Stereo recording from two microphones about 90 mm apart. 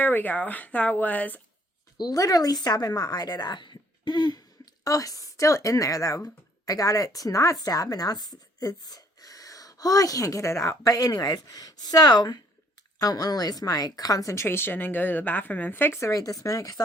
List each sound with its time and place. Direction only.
0.0 s speech: 20° left (ahead or behind)
2.0 s a woman's voice: 45° left (ahead or behind)